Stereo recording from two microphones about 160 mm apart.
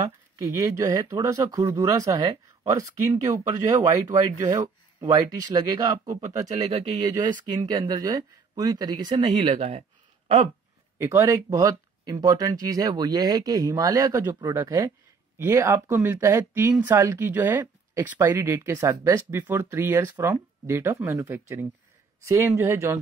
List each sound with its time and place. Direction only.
0.0 s speech: 20° right (ahead or behind)
7.4 s speech: 25° right (ahead or behind)
9.2 s speech: 40° right (ahead or behind)
11.0 s speech: 20° right (ahead or behind)